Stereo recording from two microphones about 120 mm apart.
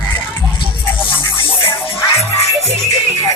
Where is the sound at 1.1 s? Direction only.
45° left (ahead or behind).